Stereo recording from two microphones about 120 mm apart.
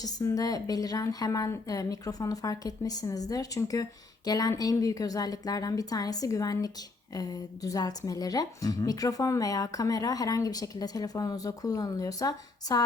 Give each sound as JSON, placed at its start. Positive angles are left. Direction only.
{"t": 0.0, "sound": "a woman's voice", "side_deg": 30}